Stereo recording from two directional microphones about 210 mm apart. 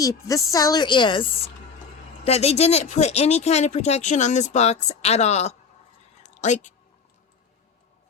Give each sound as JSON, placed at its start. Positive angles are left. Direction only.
{"t": 0.0, "sound": "a woman's voice", "side_deg": 15}